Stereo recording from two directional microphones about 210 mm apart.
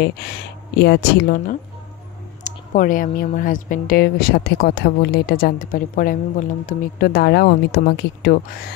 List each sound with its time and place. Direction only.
0.0 s a woman's voice: 50° left (ahead or behind)